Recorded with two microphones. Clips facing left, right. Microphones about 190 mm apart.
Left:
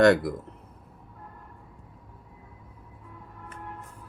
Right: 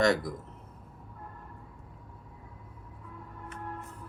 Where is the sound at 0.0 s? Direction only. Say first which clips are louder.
Left 7 dB; 60° left (ahead or behind).